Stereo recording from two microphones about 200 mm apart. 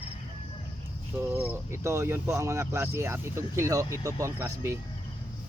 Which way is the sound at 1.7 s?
15° right (ahead or behind).